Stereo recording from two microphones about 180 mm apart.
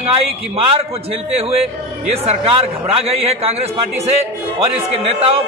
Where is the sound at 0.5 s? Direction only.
30° right (ahead or behind).